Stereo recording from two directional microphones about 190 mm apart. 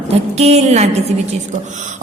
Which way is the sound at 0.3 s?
35° right (ahead or behind).